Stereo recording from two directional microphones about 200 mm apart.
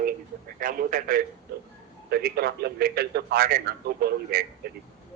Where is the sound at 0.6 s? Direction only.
45° right (ahead or behind).